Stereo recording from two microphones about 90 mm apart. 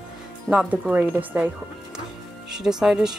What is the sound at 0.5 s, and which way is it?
Speech, 15° right (ahead or behind).